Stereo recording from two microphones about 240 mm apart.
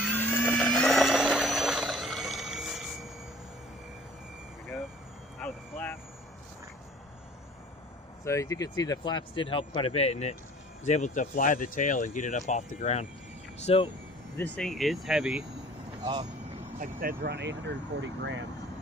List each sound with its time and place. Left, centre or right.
0.1 s vehicle: centre
5.4 s vehicle: centre
8.2 s speech: centre
14.3 s speech: centre
16.8 s speech: right